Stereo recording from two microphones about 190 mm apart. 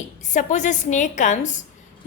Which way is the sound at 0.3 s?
40° left (ahead or behind).